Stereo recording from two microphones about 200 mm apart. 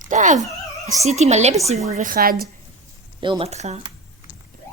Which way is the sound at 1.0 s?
35° right (ahead or behind).